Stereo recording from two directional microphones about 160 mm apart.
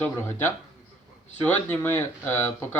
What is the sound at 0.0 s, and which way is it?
A man's voice, 15° left (ahead or behind).